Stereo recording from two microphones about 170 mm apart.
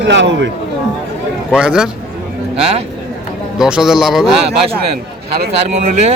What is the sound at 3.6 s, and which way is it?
Speech, 5° right (ahead or behind).